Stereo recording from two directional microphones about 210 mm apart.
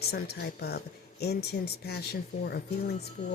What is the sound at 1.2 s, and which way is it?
Speech, 50° left (ahead or behind).